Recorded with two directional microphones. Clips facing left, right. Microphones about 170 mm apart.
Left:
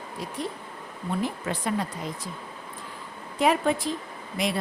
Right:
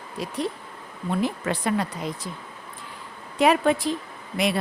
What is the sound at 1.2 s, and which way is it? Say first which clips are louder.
Speech: right 5 dB; 75° right (ahead or behind).